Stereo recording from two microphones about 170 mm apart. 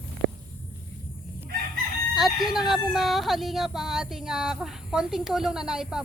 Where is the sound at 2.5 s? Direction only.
Centre (ahead or behind).